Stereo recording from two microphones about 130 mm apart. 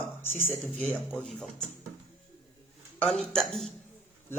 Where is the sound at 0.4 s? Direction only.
10° left (ahead or behind).